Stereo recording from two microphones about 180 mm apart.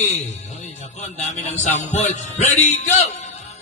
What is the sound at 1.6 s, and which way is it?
Music, 40° left (ahead or behind).